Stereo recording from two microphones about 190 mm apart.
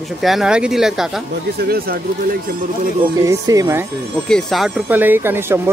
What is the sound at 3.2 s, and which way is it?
Speech, 15° right (ahead or behind).